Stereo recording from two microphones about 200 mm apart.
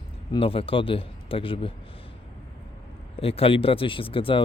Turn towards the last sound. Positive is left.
turn(degrees=25)  # may be behind; listen again after turning